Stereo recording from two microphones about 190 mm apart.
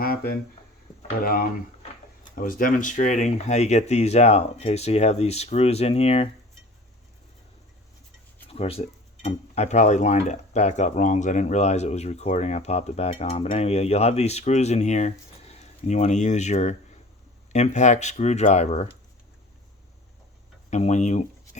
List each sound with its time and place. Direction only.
0.0 s a sound: 50° left (ahead or behind)
1.2 s speech: 50° left (ahead or behind); by 6.2 s 30° left (ahead or behind)
8.4 s speech: 30° left (ahead or behind)
20.7 s speech: 35° left (ahead or behind)